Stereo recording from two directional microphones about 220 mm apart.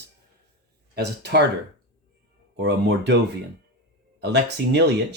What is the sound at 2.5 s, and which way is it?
Speech, 50° right (ahead or behind).